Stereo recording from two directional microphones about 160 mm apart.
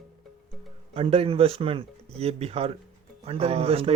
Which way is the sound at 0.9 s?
40° right (ahead or behind).